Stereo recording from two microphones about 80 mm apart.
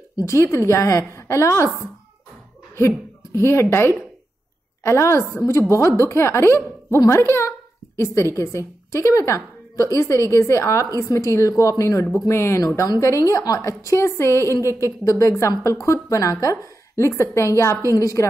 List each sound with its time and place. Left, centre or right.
0.1 s a woman's voice: left
3.3 s a woman's voice: left